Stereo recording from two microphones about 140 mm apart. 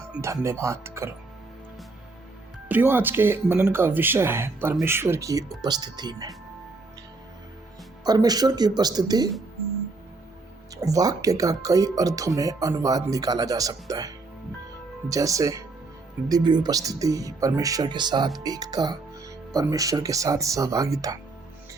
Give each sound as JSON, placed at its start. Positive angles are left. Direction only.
{"t": 0.6, "sound": "speech", "side_deg": -20}
{"t": 2.6, "sound": "speech", "side_deg": -15}
{"t": 8.0, "sound": "speech", "side_deg": -30}
{"t": 10.8, "sound": "speech", "side_deg": -25}
{"t": 15.1, "sound": "speech", "side_deg": -25}